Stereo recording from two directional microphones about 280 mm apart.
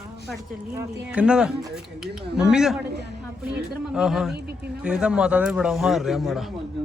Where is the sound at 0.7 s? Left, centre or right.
Centre.